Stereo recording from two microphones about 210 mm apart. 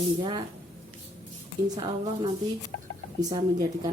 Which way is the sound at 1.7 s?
25° right (ahead or behind).